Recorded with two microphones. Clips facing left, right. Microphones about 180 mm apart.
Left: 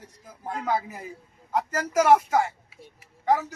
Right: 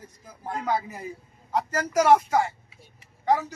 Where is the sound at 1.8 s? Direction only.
5° left (ahead or behind).